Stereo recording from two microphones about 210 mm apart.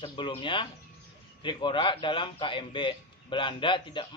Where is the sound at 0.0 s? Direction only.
25° left (ahead or behind).